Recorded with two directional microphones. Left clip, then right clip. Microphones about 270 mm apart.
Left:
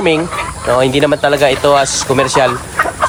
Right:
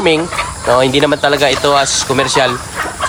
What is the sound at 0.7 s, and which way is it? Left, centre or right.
Speech, centre.